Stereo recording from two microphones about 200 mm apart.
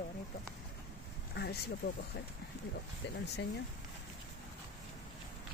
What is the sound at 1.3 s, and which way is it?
Speech, 55° left (ahead or behind).